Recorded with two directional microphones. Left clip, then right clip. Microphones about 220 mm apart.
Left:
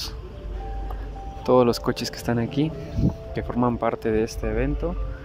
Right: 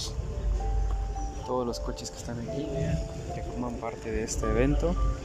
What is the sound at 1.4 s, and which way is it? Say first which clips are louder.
Speech: left 13 dB; 25° left (ahead or behind).